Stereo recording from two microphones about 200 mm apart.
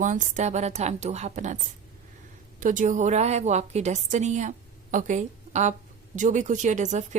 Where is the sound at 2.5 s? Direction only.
40° right (ahead or behind).